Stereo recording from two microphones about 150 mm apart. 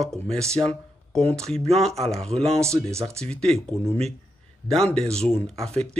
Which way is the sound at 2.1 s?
5° left (ahead or behind).